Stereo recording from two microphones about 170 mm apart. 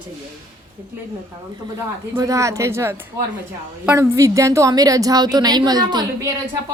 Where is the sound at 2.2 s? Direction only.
20° right (ahead or behind).